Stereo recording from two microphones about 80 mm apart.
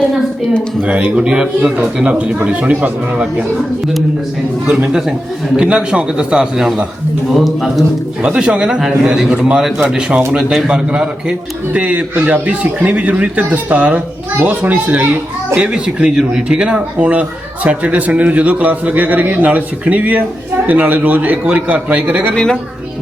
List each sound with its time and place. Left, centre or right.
0.8 s speech: centre
4.6 s a man's voice: centre
8.2 s a man's voice: centre